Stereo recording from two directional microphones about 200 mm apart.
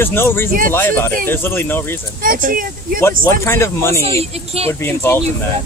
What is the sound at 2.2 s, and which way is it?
Speech, 45° right (ahead or behind).